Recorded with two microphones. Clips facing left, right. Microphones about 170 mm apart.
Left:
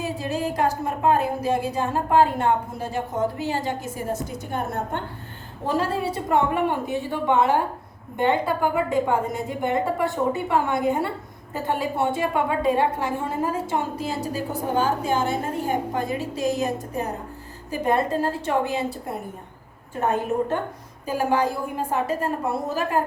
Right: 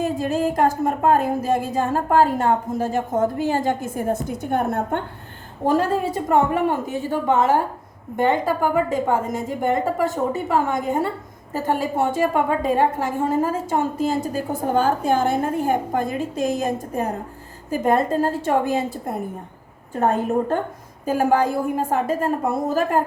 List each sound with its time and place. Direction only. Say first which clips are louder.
0.0 s a woman's voice: right 5 dB; 50° right (ahead or behind)